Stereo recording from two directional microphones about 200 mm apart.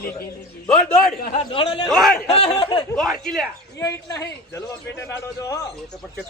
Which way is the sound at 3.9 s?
15° left (ahead or behind).